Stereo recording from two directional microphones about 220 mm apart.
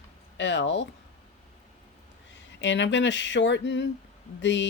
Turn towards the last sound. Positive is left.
turn(degrees=55)  # may be behind; listen again after turning